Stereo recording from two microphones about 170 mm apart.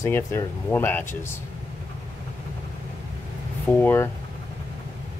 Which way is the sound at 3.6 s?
10° left (ahead or behind).